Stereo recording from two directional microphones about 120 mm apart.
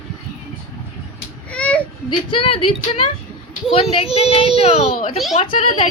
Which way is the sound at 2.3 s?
50° left (ahead or behind).